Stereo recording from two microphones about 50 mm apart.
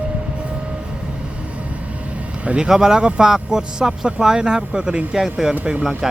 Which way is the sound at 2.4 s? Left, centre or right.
Right.